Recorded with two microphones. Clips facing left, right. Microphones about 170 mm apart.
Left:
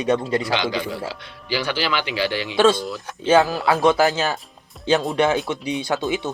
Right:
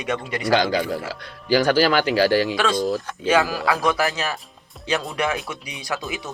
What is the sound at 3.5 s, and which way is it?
Speech, 25° left (ahead or behind).